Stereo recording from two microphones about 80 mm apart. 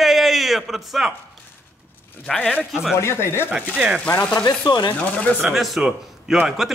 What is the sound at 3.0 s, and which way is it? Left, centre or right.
Speech, left.